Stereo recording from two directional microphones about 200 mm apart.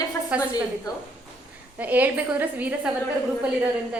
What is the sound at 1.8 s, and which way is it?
A woman's voice, 10° right (ahead or behind).